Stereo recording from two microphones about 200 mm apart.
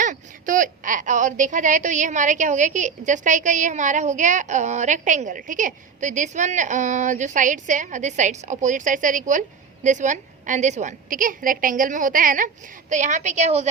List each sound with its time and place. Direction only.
0.0 s a woman's voice: 40° right (ahead or behind)